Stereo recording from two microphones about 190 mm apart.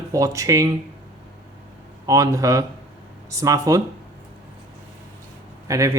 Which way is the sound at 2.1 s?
15° right (ahead or behind).